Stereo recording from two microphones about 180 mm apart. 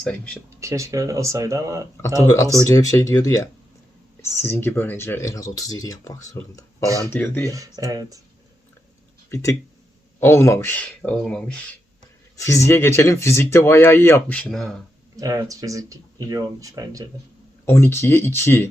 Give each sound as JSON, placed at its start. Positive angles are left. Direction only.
{"t": 0.0, "sound": "speech", "side_deg": 5}
{"t": 0.6, "sound": "speech", "side_deg": -15}
{"t": 2.0, "sound": "speech", "side_deg": 15}
{"t": 7.5, "sound": "speech", "side_deg": -20}
{"t": 9.3, "sound": "speech", "side_deg": 15}
{"t": 12.4, "sound": "speech", "side_deg": 15}
{"t": 15.1, "sound": "speech", "side_deg": -20}
{"t": 17.7, "sound": "speech", "side_deg": 15}